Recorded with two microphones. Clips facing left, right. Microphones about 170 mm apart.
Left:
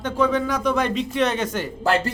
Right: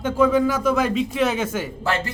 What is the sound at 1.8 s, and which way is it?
Speech, 40° left (ahead or behind).